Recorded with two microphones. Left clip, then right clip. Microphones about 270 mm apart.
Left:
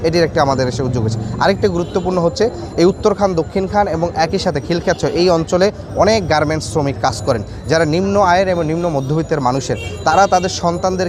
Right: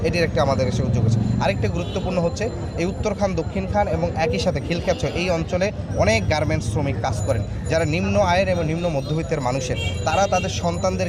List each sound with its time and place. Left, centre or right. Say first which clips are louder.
0.0 s speech: left 7 dB; left